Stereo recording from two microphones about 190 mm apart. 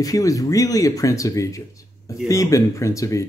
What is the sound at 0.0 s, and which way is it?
Speech, 20° left (ahead or behind).